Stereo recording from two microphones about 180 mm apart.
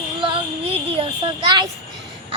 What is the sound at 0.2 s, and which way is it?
Child singing, 30° right (ahead or behind).